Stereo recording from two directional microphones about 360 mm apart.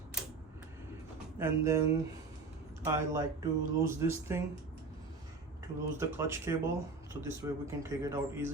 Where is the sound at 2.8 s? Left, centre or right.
Centre.